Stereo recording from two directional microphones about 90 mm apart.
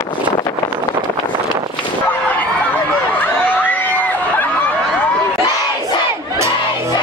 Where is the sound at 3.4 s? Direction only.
20° left (ahead or behind).